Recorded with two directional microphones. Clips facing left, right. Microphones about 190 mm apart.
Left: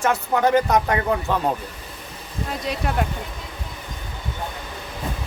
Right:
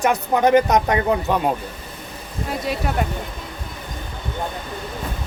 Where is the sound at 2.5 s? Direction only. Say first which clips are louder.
Right 2 dB; centre (ahead or behind).